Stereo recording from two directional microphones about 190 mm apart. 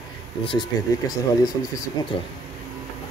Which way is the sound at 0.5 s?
20° left (ahead or behind).